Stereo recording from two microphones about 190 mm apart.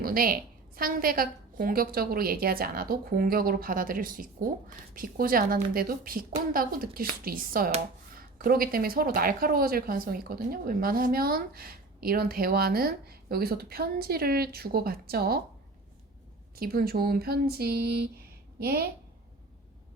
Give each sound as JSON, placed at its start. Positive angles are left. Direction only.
{"t": 0.0, "sound": "a woman's voice", "side_deg": -50}
{"t": 16.6, "sound": "a woman's voice", "side_deg": -50}